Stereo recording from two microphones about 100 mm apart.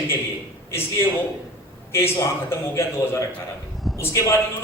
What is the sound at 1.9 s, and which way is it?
Speech, 25° left (ahead or behind).